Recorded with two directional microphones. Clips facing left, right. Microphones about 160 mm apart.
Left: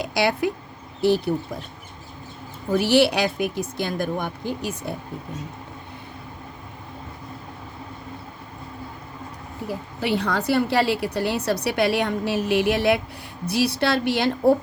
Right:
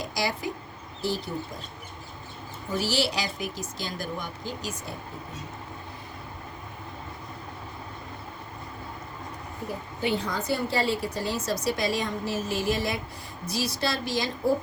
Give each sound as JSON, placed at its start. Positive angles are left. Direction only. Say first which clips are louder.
{"t": 0.0, "sound": "a woman's voice", "louder": "left 8 dB", "side_deg": 65}
{"t": 2.6, "sound": "a woman's voice", "louder": "left 9 dB", "side_deg": 60}
{"t": 10.0, "sound": "a woman's voice", "louder": "left 5 dB", "side_deg": 75}